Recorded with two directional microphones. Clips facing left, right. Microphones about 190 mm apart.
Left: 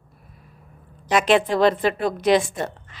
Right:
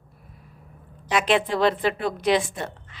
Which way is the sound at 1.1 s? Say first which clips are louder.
Left 4 dB; 45° left (ahead or behind).